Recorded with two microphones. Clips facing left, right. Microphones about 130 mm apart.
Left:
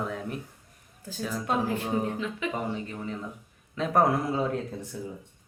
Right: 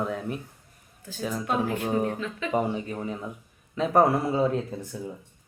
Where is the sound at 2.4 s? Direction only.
15° left (ahead or behind).